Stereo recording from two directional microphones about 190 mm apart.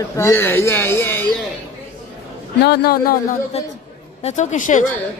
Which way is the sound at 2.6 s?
55° left (ahead or behind).